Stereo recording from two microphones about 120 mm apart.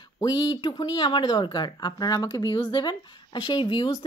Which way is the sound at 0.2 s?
35° left (ahead or behind).